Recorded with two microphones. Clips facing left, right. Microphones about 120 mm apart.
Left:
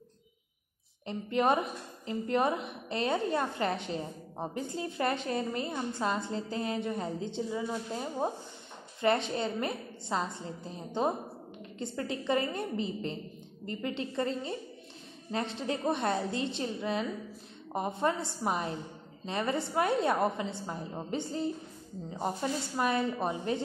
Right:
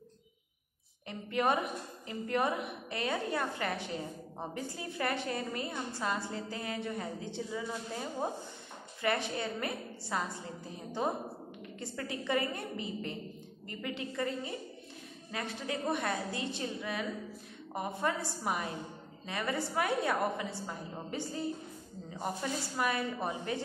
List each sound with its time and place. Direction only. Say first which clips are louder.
1.0 s a woman's voice: left 3 dB; 20° left (ahead or behind)
13.7 s a woman's voice: left 4 dB; 25° left (ahead or behind)